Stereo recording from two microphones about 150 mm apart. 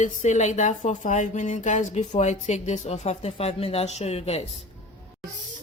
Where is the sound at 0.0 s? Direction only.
50° left (ahead or behind).